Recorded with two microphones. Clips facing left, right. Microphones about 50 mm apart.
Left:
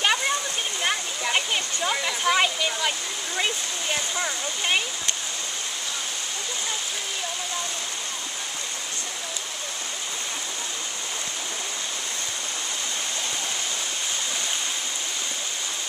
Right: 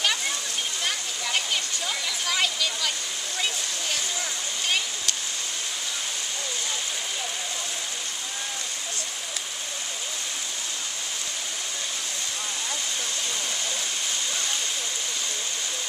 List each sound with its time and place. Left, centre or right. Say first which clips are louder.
0.8 s waterfall: left 4 dB; left
3.9 s speech: left 6 dB; left